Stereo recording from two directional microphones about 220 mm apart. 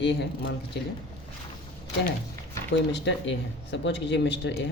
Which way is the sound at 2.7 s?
50° left (ahead or behind).